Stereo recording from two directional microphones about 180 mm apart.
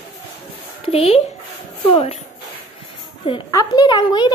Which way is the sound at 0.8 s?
35° left (ahead or behind).